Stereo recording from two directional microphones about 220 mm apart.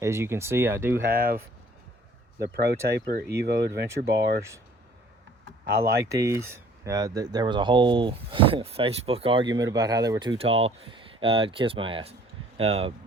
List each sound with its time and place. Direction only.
0.0 s speech: 10° right (ahead or behind)
1.0 s speech: 45° right (ahead or behind)
2.4 s speech: 45° right (ahead or behind)
3.8 s speech: 15° right (ahead or behind)
5.8 s speech: 10° right (ahead or behind)